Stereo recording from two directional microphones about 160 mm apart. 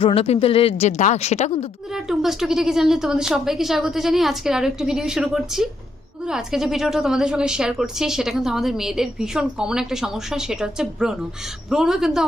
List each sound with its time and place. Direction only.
0.0 s speech: 35° left (ahead or behind)
1.9 s a woman's voice: centre (ahead or behind)